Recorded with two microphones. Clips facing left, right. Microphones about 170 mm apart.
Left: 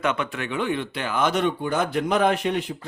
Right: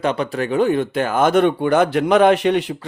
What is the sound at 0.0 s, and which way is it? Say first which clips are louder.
Speech: right 5 dB; 35° right (ahead or behind).